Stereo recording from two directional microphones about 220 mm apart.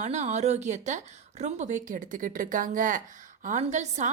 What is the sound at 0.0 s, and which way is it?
Speech, 30° right (ahead or behind).